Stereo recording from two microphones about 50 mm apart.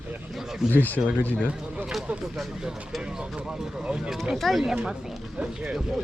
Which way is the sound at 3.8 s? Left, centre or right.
Centre.